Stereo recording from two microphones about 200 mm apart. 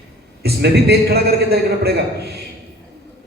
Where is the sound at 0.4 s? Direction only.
55° right (ahead or behind).